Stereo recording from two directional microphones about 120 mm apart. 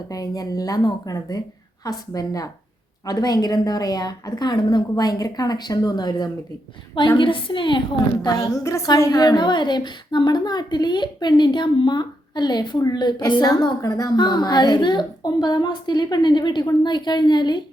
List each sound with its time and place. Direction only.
0.1 s a woman's voice: 30° left (ahead or behind)
7.2 s a woman's voice: 45° left (ahead or behind)
8.2 s a woman's voice: 30° left (ahead or behind)